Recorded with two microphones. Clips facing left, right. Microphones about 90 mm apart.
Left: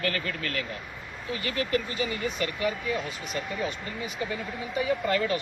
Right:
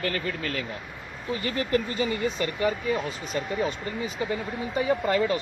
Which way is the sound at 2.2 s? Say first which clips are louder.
Right 3 dB; 30° right (ahead or behind).